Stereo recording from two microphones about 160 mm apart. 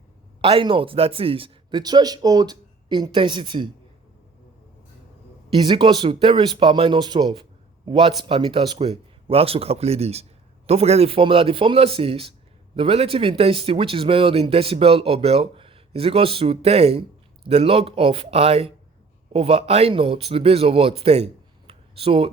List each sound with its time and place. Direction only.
0.4 s speech: 35° right (ahead or behind)
5.5 s speech: 30° right (ahead or behind)
21.7 s a sound: 35° right (ahead or behind)